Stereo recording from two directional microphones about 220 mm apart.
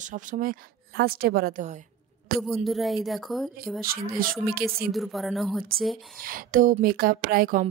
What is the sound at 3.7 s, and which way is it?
Speech, 40° right (ahead or behind).